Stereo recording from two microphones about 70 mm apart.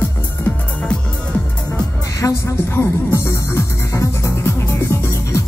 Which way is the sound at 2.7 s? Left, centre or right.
Left.